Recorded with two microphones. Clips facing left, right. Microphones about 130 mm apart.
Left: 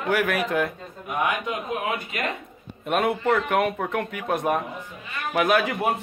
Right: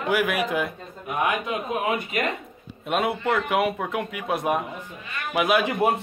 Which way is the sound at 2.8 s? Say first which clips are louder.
Left 2 dB; centre (ahead or behind).